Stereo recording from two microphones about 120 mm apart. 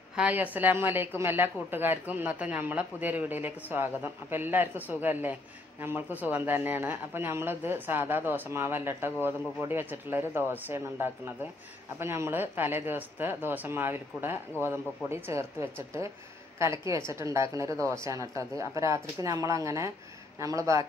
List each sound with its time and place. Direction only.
0.1 s a man's voice: 10° right (ahead or behind); by 20.8 s 25° right (ahead or behind)